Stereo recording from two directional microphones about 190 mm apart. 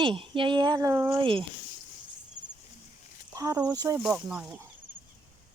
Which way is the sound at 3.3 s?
20° right (ahead or behind).